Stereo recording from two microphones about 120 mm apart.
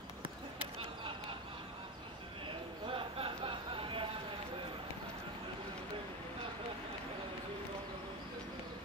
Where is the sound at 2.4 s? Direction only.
50° right (ahead or behind).